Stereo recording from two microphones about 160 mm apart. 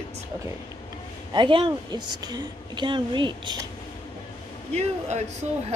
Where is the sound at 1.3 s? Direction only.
30° right (ahead or behind).